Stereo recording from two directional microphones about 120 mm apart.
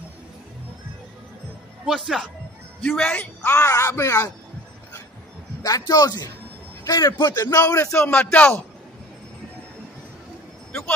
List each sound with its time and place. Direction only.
1.9 s speech: centre (ahead or behind)
3.1 s speech: 15° left (ahead or behind)
5.6 s a man's voice: 30° left (ahead or behind)
8.0 s speech: 15° left (ahead or behind)